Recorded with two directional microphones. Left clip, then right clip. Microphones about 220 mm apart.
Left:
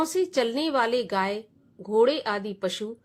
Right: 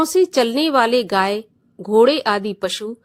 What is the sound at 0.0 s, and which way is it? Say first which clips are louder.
A woman's voice: right 9 dB; 35° right (ahead or behind).